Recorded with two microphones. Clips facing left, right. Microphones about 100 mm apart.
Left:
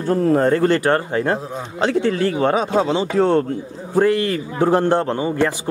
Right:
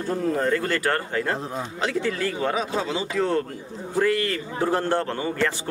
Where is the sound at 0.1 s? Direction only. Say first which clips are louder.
Left 8 dB; 55° left (ahead or behind).